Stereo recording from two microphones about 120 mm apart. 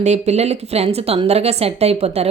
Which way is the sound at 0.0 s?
70° right (ahead or behind).